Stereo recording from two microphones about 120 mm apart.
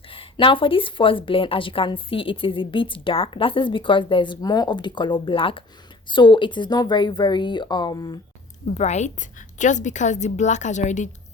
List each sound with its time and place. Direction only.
0.1 s a woman's voice: 45° left (ahead or behind)
8.6 s a woman's voice: 75° left (ahead or behind)
9.6 s a woman's voice: 90° left